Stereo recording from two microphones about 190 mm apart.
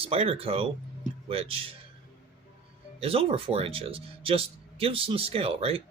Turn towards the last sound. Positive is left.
turn(degrees=-30)  # may be behind; listen again after turning